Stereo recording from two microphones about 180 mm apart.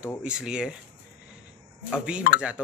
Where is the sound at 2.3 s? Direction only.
55° left (ahead or behind).